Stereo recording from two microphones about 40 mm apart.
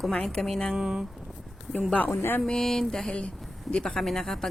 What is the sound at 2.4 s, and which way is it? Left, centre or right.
Speech, centre.